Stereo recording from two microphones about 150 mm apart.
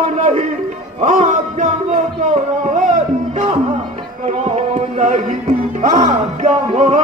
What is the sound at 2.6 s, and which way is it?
Music, 60° right (ahead or behind).